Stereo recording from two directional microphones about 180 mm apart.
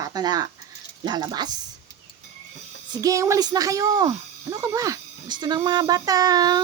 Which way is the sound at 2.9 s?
20° right (ahead or behind).